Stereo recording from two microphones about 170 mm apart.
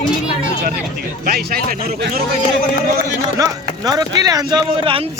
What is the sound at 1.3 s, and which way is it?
Speech, 60° right (ahead or behind).